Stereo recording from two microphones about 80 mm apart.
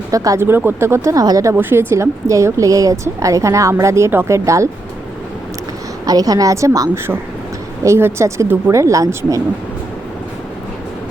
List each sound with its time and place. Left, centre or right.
0.3 s speech: right
1.1 s a woman's voice: right
1.5 s speech: right
6.1 s a woman's voice: right
7.9 s a woman's voice: right